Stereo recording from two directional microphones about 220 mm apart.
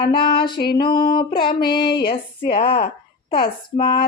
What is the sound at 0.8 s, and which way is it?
Female singing, 20° left (ahead or behind).